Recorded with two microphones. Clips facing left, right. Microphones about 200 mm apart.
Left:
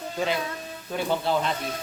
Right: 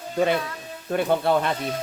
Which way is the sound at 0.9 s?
55° right (ahead or behind).